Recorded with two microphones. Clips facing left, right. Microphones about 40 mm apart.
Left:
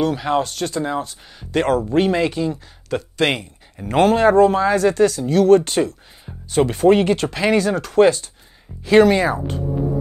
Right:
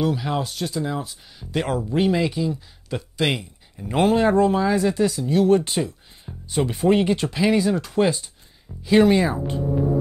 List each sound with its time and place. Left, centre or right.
0.1 s speech: left
0.4 s speech: left
1.5 s speech: left
3.2 s a sound: left
3.8 s speech: left
4.9 s speech: left